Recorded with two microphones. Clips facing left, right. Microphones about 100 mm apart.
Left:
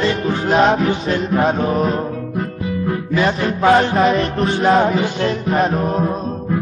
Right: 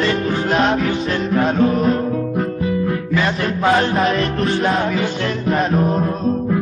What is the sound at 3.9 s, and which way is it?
Music, centre (ahead or behind).